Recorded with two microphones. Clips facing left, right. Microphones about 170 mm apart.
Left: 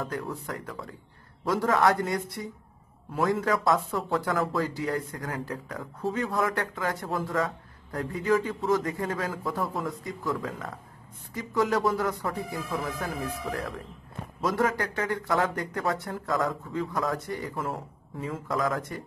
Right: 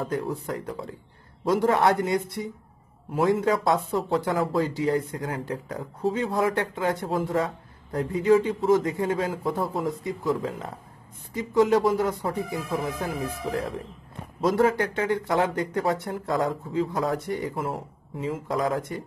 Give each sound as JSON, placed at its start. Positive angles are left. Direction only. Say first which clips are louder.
{"t": 0.0, "sound": "speech", "louder": "right 5 dB", "side_deg": -25}